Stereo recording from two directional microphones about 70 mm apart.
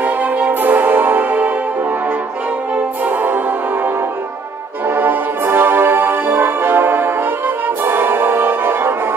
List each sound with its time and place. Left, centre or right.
0.0 s music: right
2.7 s music: right